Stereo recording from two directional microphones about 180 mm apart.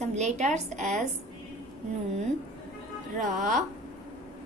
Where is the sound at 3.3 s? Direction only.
40° right (ahead or behind).